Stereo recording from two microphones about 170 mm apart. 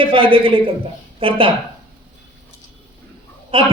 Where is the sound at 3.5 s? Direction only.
30° right (ahead or behind).